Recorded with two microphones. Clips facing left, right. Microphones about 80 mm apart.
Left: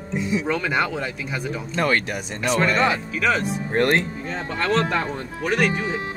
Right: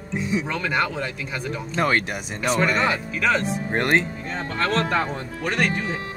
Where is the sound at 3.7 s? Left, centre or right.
Centre.